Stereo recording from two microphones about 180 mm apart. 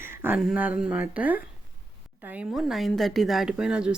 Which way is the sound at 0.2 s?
5° right (ahead or behind).